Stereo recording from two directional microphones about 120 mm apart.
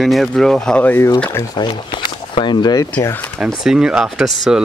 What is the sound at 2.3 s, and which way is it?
Speech, 40° left (ahead or behind).